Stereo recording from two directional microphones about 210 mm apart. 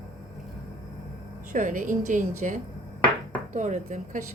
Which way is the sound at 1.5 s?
40° right (ahead or behind).